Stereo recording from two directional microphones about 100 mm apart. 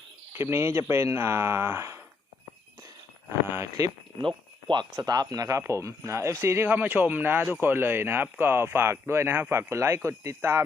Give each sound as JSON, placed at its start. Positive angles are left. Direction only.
{"t": 0.3, "sound": "speech", "side_deg": -25}
{"t": 3.5, "sound": "speech", "side_deg": -35}
{"t": 4.2, "sound": "speech", "side_deg": -55}
{"t": 4.9, "sound": "speech", "side_deg": -40}